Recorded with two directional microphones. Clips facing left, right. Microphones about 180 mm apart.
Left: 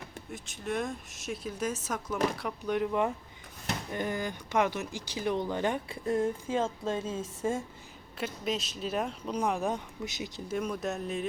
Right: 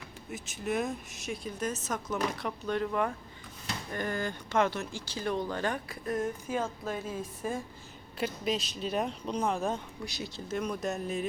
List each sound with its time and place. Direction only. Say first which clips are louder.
0.3 s speech: right 2 dB; 5° right (ahead or behind); by 7.6 s 25° left (ahead or behind)
8.2 s speech: right 1 dB; centre (ahead or behind); by 10.6 s 15° left (ahead or behind)
10.6 s speech: even; 5° left (ahead or behind)